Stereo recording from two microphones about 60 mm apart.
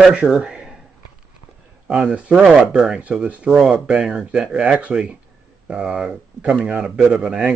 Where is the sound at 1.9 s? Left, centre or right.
Centre.